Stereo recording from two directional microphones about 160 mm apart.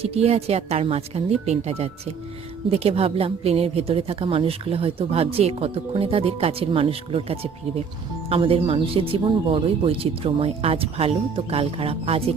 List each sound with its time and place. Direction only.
0.0 s a woman's voice: 40° right (ahead or behind)